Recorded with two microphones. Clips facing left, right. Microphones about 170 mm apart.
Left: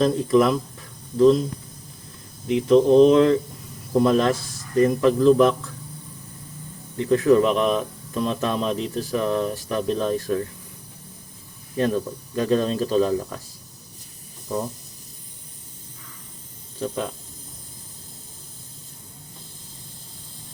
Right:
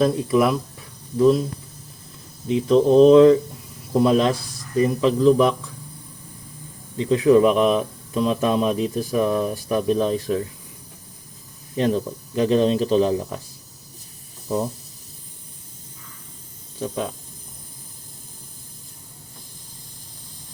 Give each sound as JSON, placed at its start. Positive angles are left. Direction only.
{"t": 0.0, "sound": "speech", "side_deg": -10}
{"t": 2.6, "sound": "speech", "side_deg": -15}
{"t": 6.9, "sound": "speech", "side_deg": -15}
{"t": 11.8, "sound": "speech", "side_deg": -20}
{"t": 14.4, "sound": "speech", "side_deg": -10}
{"t": 16.8, "sound": "speech", "side_deg": -10}